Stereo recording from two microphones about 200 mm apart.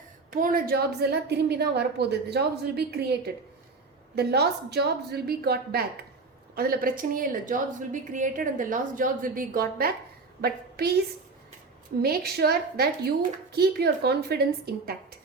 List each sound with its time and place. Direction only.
0.3 s a woman's voice: 45° right (ahead or behind)
12.0 s a woman's voice: 50° right (ahead or behind)